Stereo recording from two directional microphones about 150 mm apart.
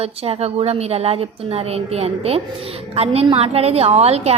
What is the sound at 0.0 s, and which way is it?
A woman's voice, 45° right (ahead or behind).